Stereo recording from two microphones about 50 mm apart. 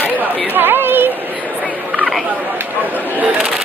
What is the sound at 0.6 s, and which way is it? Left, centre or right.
Speech, right.